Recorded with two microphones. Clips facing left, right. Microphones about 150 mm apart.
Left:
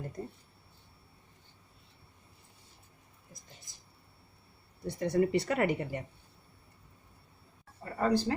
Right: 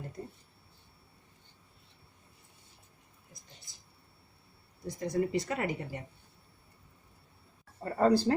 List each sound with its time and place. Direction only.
4.9 s speech: 65° left (ahead or behind)
7.9 s speech: 35° right (ahead or behind)